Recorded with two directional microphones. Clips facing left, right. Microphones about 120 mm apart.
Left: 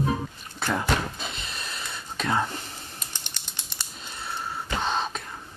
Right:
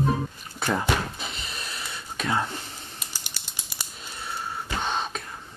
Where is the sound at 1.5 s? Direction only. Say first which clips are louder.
Even; centre (ahead or behind).